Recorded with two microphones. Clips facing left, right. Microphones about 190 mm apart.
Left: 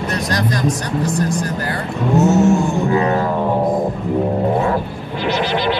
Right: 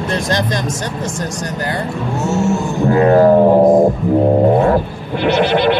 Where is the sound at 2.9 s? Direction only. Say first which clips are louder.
Right 10 dB; 45° right (ahead or behind).